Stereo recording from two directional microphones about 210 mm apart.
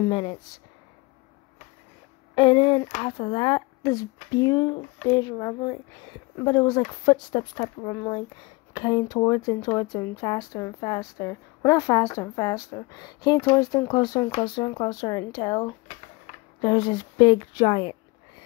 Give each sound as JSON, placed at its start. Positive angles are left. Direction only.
{"t": 0.1, "sound": "a woman's voice", "side_deg": 20}
{"t": 2.3, "sound": "a woman's voice", "side_deg": 25}